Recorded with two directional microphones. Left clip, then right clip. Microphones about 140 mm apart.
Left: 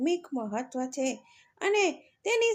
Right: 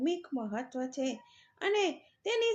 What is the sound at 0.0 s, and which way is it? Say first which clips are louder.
Speech: left 4 dB; 50° left (ahead or behind).